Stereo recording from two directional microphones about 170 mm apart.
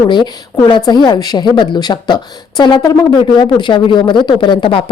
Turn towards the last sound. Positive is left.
turn(degrees=30)  # may be behind; listen again after turning